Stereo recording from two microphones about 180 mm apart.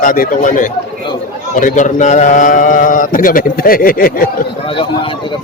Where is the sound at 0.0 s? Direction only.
50° left (ahead or behind).